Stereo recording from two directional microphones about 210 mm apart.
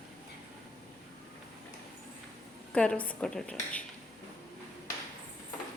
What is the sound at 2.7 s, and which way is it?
A woman's voice, 5° left (ahead or behind).